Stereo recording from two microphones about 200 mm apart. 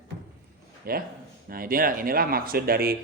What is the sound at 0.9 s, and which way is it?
Speech, 50° right (ahead or behind).